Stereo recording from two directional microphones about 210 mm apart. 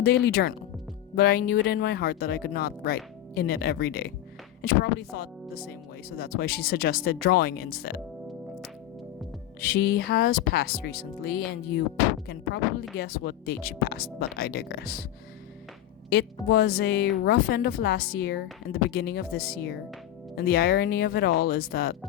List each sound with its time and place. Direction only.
0.0 s speech: 50° left (ahead or behind)
9.6 s speech: 50° left (ahead or behind)
13.0 s speech: 45° left (ahead or behind)
16.0 s speech: 50° left (ahead or behind)